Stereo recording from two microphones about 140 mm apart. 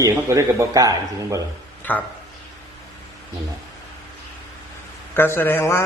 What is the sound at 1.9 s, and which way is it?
Speech, 10° left (ahead or behind).